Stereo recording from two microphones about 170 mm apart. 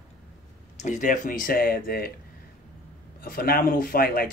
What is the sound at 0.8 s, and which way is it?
Speech, 45° left (ahead or behind).